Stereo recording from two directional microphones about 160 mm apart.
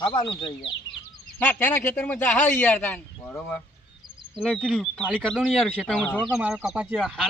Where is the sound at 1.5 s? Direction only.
10° left (ahead or behind).